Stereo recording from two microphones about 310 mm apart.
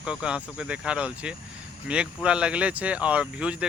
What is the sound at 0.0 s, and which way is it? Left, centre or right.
Speech, centre.